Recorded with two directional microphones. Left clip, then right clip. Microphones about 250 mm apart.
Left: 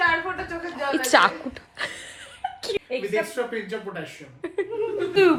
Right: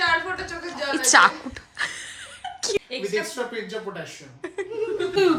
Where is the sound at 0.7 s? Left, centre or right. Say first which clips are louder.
Right 1 dB; centre.